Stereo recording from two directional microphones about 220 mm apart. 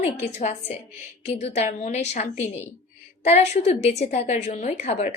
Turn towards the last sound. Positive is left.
turn(degrees=30)  # may be behind; listen again after turning